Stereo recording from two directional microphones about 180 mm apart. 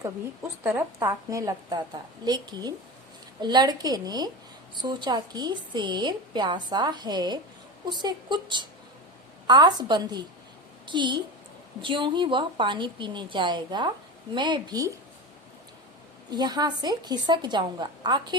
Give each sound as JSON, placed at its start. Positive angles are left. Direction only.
{"t": 0.0, "sound": "a woman's voice", "side_deg": -15}
{"t": 16.3, "sound": "a woman's voice", "side_deg": -25}